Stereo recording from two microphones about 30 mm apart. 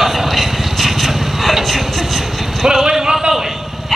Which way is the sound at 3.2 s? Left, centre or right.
Right.